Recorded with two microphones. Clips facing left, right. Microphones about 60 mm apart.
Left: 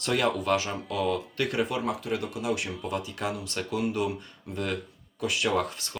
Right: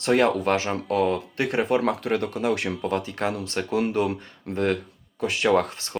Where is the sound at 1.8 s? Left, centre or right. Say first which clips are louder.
Right 6 dB; right.